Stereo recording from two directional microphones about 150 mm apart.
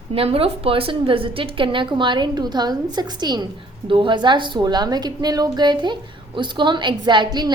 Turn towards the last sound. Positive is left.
turn(degrees=-30)  # may be behind; listen again after turning